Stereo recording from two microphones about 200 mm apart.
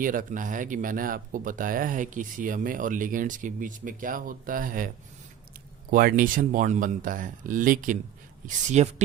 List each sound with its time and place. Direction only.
0.0 s speech: 45° right (ahead or behind)
5.9 s speech: 45° right (ahead or behind)